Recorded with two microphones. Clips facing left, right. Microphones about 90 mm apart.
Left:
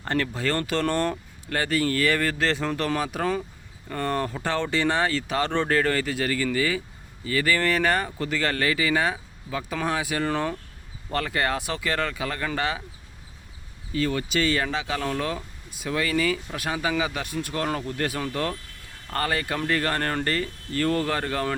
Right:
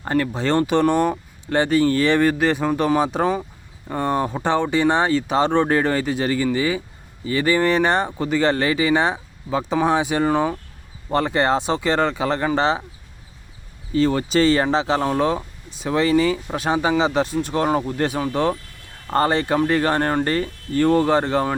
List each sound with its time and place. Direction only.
0.0 s speech: 10° right (ahead or behind)
0.3 s speech: 20° right (ahead or behind)
1.5 s speech: 25° right (ahead or behind)
13.9 s speech: 30° right (ahead or behind)